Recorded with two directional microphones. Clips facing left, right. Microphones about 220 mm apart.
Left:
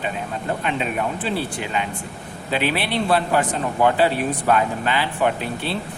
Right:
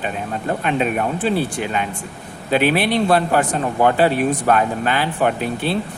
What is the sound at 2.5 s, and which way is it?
A man's voice, 50° right (ahead or behind).